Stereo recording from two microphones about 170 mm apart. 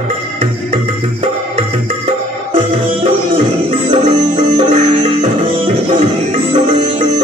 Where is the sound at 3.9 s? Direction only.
40° right (ahead or behind).